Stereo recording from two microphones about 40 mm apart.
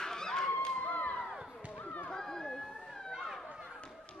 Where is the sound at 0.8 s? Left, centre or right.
Left.